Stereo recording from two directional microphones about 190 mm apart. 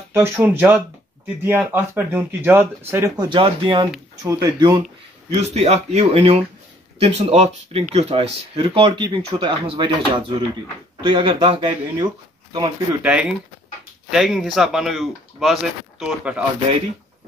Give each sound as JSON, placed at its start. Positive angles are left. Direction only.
{"t": 0.1, "sound": "speech", "side_deg": -10}
{"t": 5.3, "sound": "speech", "side_deg": -35}
{"t": 13.0, "sound": "speech", "side_deg": -5}